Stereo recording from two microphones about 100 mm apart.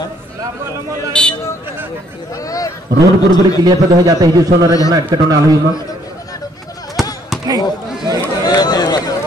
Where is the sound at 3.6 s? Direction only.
40° right (ahead or behind).